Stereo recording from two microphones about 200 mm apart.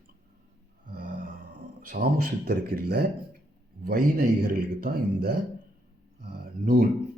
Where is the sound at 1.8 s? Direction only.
45° right (ahead or behind).